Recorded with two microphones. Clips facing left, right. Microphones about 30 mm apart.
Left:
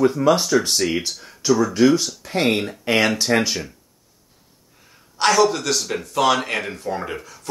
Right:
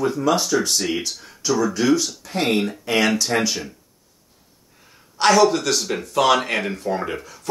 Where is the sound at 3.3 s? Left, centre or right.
Left.